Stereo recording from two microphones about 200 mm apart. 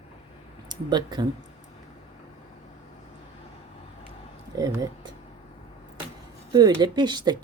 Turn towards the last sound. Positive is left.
turn(degrees=-20)  # may be behind; listen again after turning